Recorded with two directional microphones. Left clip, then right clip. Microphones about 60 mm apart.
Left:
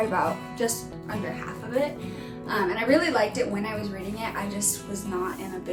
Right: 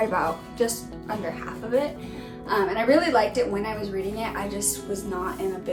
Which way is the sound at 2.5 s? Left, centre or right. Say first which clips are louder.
Right 2 dB; right.